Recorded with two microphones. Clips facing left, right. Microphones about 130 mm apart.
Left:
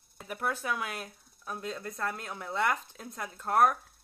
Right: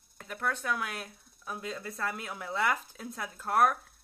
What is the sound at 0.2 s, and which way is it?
Speech, 10° left (ahead or behind).